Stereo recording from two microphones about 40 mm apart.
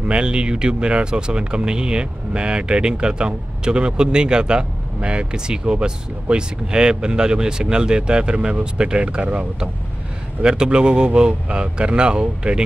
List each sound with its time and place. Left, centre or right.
0.1 s speech: right
10.4 s speech: right